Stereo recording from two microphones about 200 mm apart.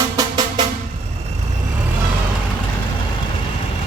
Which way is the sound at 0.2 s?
20° right (ahead or behind).